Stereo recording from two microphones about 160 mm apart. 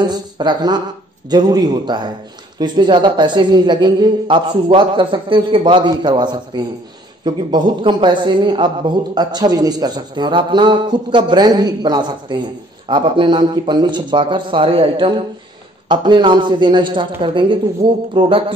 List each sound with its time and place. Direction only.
0.0 s a man's voice: 25° right (ahead or behind)